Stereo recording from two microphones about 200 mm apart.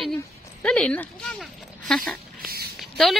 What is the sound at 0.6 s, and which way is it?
Speech, 5° left (ahead or behind).